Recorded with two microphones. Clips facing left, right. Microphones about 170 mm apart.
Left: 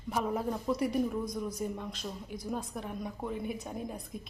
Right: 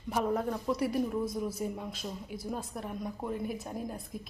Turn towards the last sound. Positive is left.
turn(degrees=0)  # may be behind; listen again after turning